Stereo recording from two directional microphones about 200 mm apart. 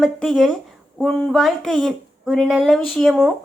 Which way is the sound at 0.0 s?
Centre (ahead or behind).